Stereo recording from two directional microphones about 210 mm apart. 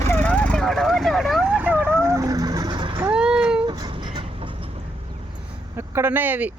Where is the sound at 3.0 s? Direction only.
5° right (ahead or behind).